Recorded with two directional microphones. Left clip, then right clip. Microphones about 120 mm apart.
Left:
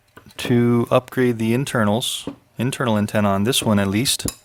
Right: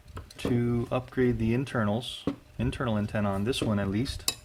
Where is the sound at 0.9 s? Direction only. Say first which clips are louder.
Left 10 dB; 85° left.